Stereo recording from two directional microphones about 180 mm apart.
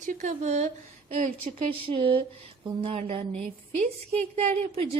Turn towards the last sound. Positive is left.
turn(degrees=-35)  # may be behind; listen again after turning